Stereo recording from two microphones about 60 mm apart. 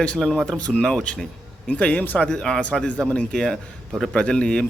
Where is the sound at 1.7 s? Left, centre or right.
Left.